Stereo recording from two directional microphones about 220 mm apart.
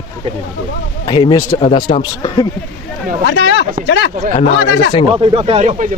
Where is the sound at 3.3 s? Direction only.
55° left (ahead or behind).